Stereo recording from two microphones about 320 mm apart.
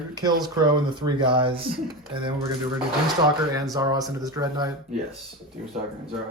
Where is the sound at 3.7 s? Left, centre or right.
Centre.